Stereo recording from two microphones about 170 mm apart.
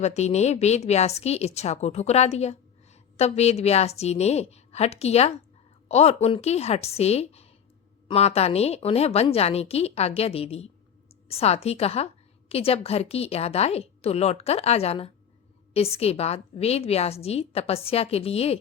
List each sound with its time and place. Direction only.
0.0 s a woman's voice: 40° left (ahead or behind)